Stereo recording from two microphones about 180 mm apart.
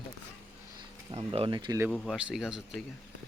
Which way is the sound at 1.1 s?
30° right (ahead or behind).